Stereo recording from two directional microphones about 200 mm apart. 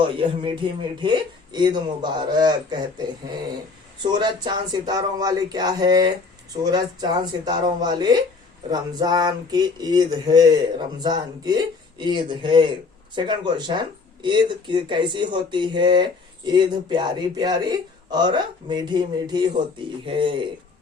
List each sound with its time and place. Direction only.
1.0 s speech: 20° right (ahead or behind)